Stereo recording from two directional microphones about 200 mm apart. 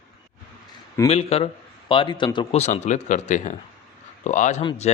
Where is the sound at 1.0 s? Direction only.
30° left (ahead or behind).